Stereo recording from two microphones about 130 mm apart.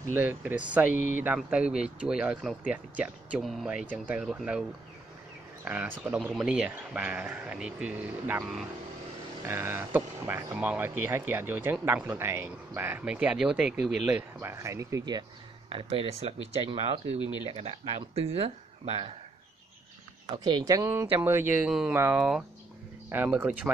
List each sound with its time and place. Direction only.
0.1 s speech: 15° right (ahead or behind)
5.7 s speech: 15° right (ahead or behind)
9.5 s speech: 20° right (ahead or behind)
14.4 s speech: 20° right (ahead or behind)
15.7 s speech: 45° right (ahead or behind)
17.2 s speech: 35° left (ahead or behind)
17.5 s speech: 50° right (ahead or behind)
20.4 s speech: 30° right (ahead or behind)
21.6 s speech: 5° right (ahead or behind)